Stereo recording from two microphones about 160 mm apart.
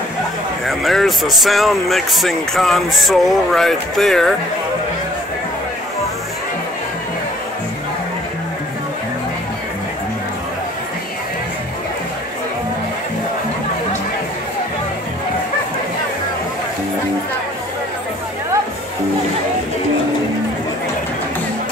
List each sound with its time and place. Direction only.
0.7 s speech: centre (ahead or behind)